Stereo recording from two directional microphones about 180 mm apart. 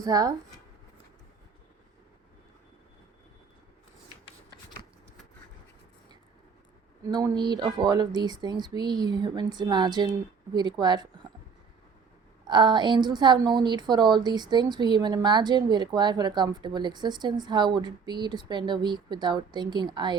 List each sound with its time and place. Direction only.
0.0 s a woman's voice: 20° right (ahead or behind)
7.0 s a woman's voice: 20° right (ahead or behind)
12.5 s a woman's voice: 25° right (ahead or behind)